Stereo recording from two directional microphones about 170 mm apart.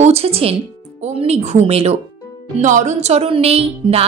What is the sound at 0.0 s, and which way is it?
Speech, 35° right (ahead or behind).